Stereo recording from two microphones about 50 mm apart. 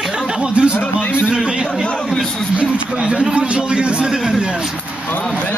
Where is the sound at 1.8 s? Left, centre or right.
Centre.